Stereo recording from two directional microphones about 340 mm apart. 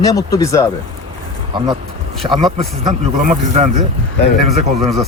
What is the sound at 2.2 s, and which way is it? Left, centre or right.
Speech, centre.